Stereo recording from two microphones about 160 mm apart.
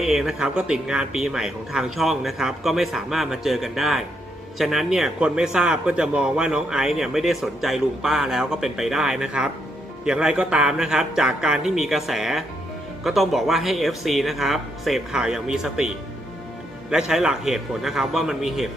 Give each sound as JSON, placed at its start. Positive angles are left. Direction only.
{"t": 0.0, "sound": "a man's voice", "side_deg": 0}
{"t": 16.9, "sound": "a man's voice", "side_deg": -5}